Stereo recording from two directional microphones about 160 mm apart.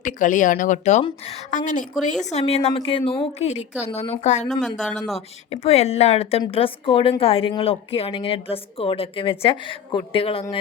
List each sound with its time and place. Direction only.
0.0 s speech: 55° left (ahead or behind)
2.3 s speech: 40° left (ahead or behind)
4.8 s speech: centre (ahead or behind)
5.5 s speech: 40° left (ahead or behind)